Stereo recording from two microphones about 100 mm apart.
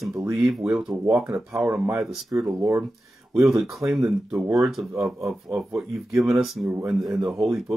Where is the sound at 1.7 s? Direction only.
30° right (ahead or behind).